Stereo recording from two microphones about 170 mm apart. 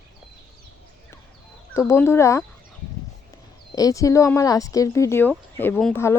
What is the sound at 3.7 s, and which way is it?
Speech, 20° left (ahead or behind).